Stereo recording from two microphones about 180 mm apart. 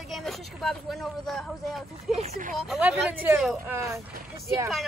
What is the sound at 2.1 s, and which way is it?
Speech, 40° right (ahead or behind).